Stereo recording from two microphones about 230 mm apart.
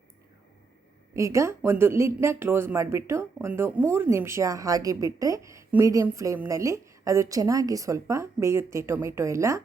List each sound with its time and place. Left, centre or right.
1.1 s speech: centre